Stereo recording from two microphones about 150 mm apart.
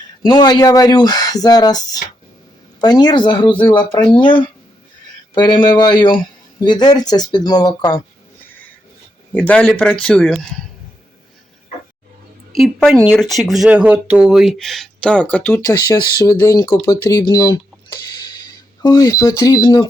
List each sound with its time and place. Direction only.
0.3 s speech: 30° left (ahead or behind)
9.3 s speech: 10° left (ahead or behind)
12.5 s speech: centre (ahead or behind); by 16.7 s 20° left (ahead or behind)
16.8 s a sound: 20° left (ahead or behind)
19.4 s speech: 25° left (ahead or behind)